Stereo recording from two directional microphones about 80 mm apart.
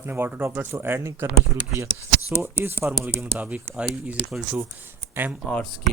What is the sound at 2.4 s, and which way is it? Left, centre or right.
Speech, right.